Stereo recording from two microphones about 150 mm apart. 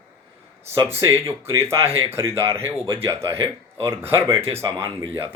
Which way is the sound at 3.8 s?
15° right (ahead or behind).